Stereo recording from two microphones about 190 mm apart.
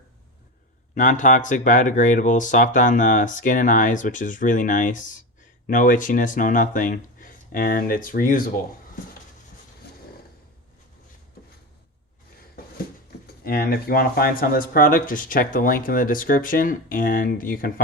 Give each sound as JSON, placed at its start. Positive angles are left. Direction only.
{"t": 0.9, "sound": "speech", "side_deg": 45}
{"t": 13.2, "sound": "speech", "side_deg": 55}